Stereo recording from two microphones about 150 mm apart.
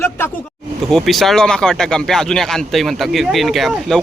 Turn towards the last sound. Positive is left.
turn(degrees=0)  # may be behind; listen again after turning